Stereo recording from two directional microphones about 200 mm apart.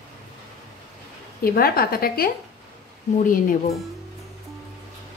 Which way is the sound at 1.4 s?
50° left (ahead or behind).